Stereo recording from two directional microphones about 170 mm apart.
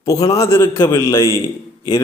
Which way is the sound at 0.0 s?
20° left (ahead or behind).